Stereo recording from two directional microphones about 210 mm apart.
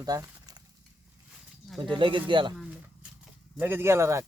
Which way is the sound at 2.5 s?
5° right (ahead or behind).